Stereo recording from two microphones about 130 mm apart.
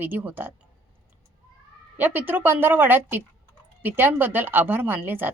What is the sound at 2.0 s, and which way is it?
Speech, 15° right (ahead or behind).